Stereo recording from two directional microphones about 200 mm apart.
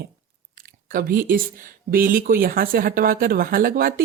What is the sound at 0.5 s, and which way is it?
Speech, 45° right (ahead or behind).